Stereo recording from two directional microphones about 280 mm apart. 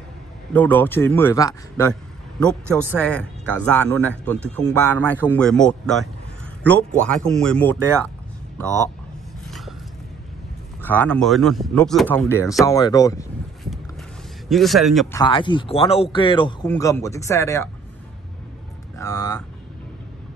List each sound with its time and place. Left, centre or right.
0.5 s a man's voice: centre
3.0 s speech: centre
10.8 s speech: centre
14.5 s speech: centre
15.1 s a man's voice: centre
18.9 s speech: centre